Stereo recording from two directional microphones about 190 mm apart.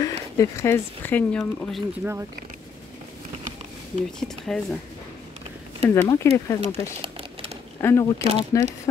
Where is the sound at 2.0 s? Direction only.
5° right (ahead or behind).